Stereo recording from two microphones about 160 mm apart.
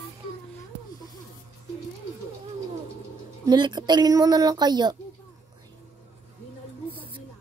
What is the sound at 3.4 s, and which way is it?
Speech, 25° right (ahead or behind).